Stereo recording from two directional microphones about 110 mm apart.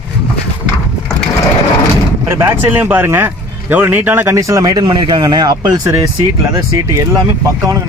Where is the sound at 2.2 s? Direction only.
25° right (ahead or behind).